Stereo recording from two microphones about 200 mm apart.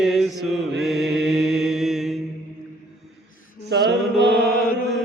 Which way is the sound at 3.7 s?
55° right (ahead or behind).